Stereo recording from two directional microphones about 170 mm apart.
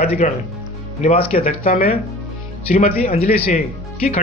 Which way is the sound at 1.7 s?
60° left (ahead or behind).